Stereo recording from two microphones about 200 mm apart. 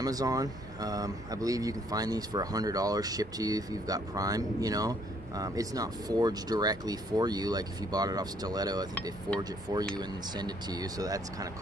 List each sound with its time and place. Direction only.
0.0 s speech: 20° right (ahead or behind)